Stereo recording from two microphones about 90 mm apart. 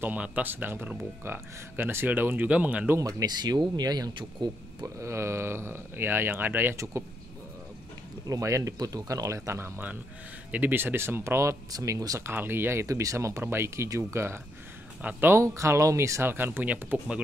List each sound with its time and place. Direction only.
0.0 s speech: 15° right (ahead or behind)
3.0 s speech: 40° right (ahead or behind); by 4.5 s 60° right (ahead or behind)
4.8 s speech: 30° right (ahead or behind)
8.3 s speech: 35° right (ahead or behind)
12.3 s speech: 25° right (ahead or behind)
12.8 s speech: 35° right (ahead or behind)
15.0 s speech: 20° right (ahead or behind)
15.4 s speech: 35° right (ahead or behind); by 17.2 s 20° right (ahead or behind)